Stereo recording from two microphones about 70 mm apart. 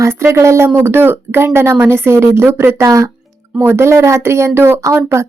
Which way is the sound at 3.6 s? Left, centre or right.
Right.